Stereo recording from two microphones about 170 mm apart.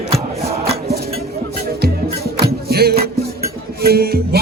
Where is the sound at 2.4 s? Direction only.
65° right (ahead or behind).